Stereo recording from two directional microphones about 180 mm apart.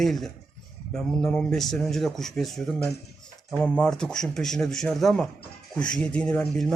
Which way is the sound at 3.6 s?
5° left (ahead or behind).